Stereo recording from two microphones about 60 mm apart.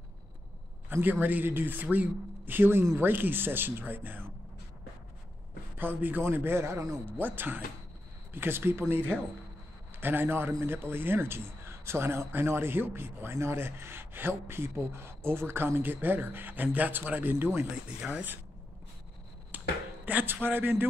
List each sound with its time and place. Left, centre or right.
0.8 s speech: right
5.8 s speech: right
7.2 s speech: right
17.6 s speech: centre
19.5 s a sound: right
20.4 s speech: right